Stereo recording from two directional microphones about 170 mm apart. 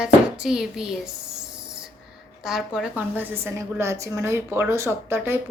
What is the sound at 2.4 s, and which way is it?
A woman's voice, centre (ahead or behind).